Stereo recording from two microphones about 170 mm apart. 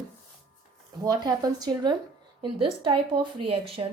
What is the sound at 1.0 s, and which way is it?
A woman's voice, 20° right (ahead or behind).